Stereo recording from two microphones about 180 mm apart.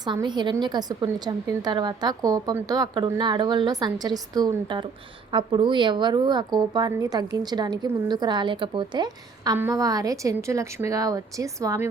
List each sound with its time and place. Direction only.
0.0 s a woman's voice: 25° right (ahead or behind)